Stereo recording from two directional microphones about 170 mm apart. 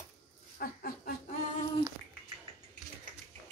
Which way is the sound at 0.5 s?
60° left (ahead or behind).